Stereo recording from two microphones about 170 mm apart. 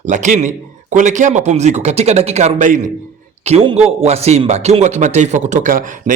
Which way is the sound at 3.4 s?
35° right (ahead or behind).